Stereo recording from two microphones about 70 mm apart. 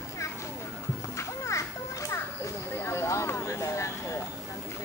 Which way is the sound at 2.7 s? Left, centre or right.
Left.